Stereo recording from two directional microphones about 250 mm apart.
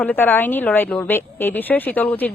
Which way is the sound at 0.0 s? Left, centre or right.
Centre.